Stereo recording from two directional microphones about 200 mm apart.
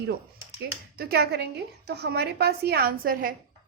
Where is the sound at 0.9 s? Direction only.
50° right (ahead or behind).